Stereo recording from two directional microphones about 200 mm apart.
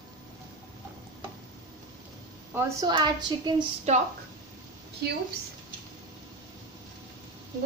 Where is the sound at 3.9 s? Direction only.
35° right (ahead or behind).